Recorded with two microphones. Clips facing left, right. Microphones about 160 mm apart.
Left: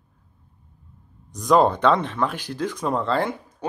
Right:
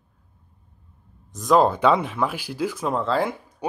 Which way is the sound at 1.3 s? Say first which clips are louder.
Even; centre (ahead or behind).